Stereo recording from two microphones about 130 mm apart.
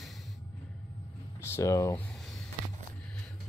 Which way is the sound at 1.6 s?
25° left (ahead or behind).